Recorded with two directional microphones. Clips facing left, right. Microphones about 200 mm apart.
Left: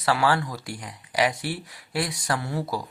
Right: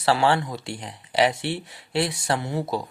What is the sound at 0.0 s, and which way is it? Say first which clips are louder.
Speech: right 2 dB; 25° right (ahead or behind).